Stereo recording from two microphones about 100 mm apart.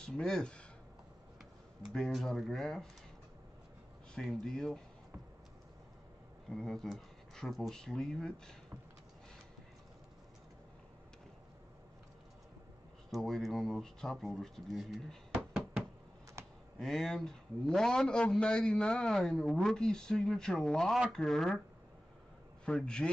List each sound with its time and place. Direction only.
0.0 s speech: 5° left (ahead or behind)
1.9 s a man's voice: centre (ahead or behind)
4.1 s a man's voice: 5° left (ahead or behind)
6.5 s a man's voice: 5° left (ahead or behind)
13.1 s speech: centre (ahead or behind)
16.4 s a sound: 30° right (ahead or behind)
16.7 s a man's voice: 5° left (ahead or behind)
22.7 s a man's voice: 10° left (ahead or behind)